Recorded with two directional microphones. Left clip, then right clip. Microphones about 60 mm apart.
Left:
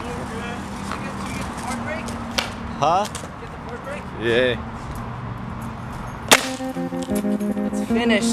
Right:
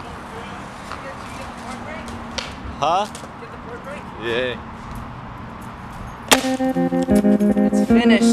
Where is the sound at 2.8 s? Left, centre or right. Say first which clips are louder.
Even; centre.